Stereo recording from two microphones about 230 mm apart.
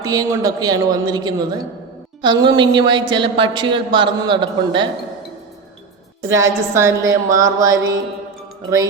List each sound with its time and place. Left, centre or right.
0.0 s a woman's voice: centre
6.2 s a woman's voice: centre